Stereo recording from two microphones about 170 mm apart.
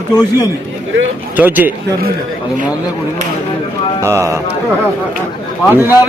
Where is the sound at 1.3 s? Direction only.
10° right (ahead or behind).